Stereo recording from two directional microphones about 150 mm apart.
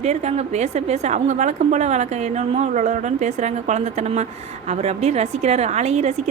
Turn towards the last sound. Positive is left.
turn(degrees=-45)  # may be behind; listen again after turning